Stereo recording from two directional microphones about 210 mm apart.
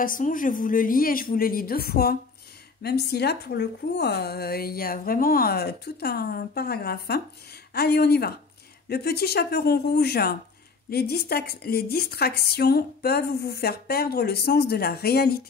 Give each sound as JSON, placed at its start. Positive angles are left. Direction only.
{"t": 0.0, "sound": "a woman's voice", "side_deg": 40}